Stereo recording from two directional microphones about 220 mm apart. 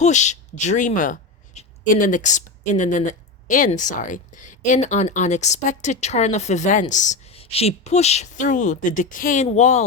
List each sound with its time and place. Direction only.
0.0 s a woman's voice: 30° left (ahead or behind)